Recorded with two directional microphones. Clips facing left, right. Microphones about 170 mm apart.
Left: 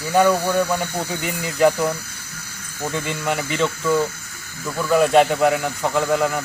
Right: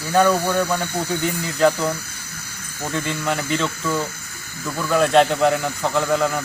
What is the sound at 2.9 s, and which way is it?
Speech, 15° left (ahead or behind).